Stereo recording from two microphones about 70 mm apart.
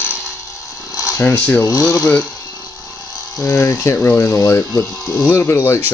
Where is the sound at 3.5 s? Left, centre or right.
Left.